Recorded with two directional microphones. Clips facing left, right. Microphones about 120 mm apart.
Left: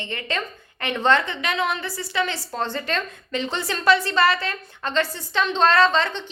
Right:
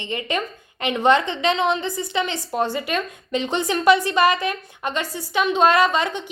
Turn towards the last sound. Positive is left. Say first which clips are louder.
# even
turn(degrees=-15)  # may be behind; listen again after turning